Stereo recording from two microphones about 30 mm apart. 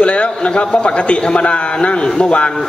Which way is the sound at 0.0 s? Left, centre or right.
Left.